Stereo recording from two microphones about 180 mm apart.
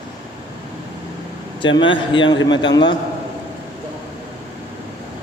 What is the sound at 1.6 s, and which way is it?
Speech, 25° left (ahead or behind).